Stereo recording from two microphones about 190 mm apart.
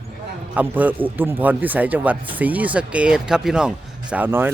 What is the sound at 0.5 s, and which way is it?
Speech, 10° right (ahead or behind).